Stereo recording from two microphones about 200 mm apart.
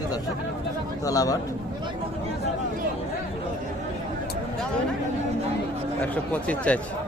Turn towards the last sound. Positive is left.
turn(degrees=5)  # may be behind; listen again after turning